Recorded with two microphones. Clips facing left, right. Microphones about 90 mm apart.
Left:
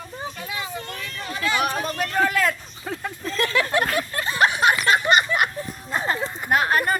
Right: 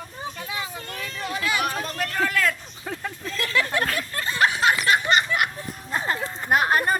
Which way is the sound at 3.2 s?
35° left (ahead or behind).